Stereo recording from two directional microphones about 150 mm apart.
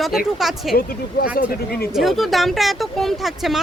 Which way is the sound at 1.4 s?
80° left.